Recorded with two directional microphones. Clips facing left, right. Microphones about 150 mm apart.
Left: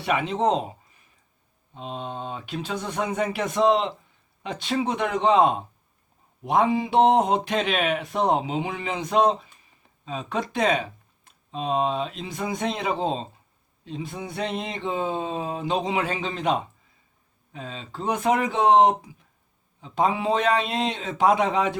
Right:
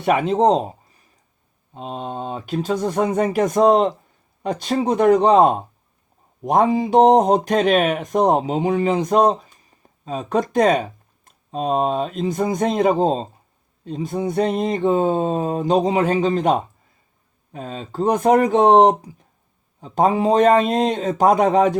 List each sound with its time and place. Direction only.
0.0 s a man's voice: 45° right (ahead or behind)